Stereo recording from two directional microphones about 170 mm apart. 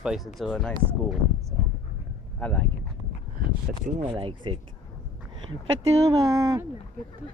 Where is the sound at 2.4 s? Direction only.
10° left (ahead or behind).